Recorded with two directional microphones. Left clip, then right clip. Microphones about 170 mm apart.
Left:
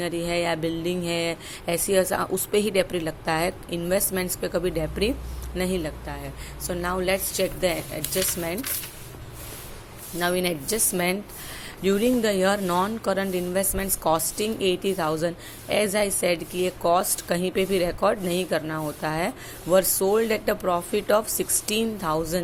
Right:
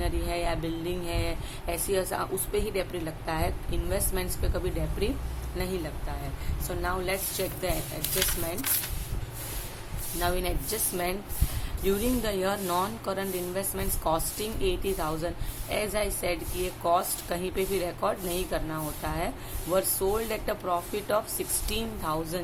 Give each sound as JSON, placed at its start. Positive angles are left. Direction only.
{"t": 0.0, "sound": "speech", "side_deg": 45}
{"t": 10.2, "sound": "speech", "side_deg": 45}